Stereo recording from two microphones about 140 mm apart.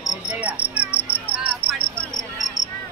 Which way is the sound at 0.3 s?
10° right (ahead or behind).